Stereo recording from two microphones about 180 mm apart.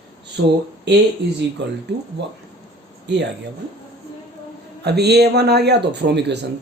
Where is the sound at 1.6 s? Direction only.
80° right.